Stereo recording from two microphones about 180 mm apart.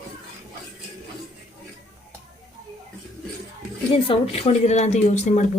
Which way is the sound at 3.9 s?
30° left (ahead or behind).